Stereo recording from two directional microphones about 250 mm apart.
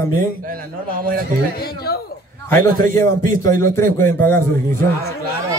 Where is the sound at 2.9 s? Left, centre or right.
Centre.